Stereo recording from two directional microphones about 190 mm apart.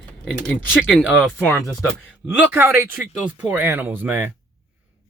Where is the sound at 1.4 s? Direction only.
10° left (ahead or behind).